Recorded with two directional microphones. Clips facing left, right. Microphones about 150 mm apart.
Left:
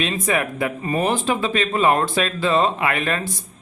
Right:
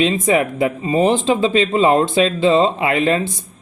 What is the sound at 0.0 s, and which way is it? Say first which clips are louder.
Speech: right 6 dB; 25° right (ahead or behind).